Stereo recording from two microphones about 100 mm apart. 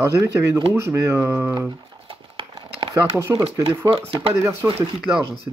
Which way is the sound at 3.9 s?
65° right (ahead or behind).